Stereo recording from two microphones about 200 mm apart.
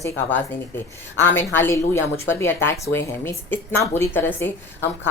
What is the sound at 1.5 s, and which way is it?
A woman's voice, 10° left (ahead or behind).